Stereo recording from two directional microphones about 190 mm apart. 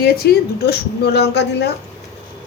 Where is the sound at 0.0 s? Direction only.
55° left (ahead or behind).